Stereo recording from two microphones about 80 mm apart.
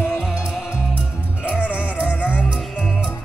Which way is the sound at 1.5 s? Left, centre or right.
Centre.